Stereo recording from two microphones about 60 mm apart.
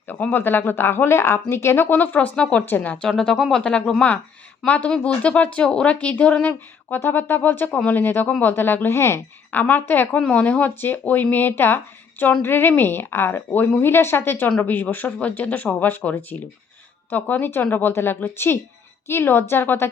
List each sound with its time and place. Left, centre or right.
0.1 s speech: left
3.0 s speech: centre; by 8.9 s left
8.9 s speech: left
9.5 s speech: left
10.1 s speech: centre; by 19.9 s left